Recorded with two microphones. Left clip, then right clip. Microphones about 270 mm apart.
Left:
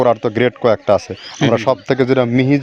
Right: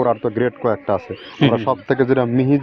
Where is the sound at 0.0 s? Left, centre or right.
Left.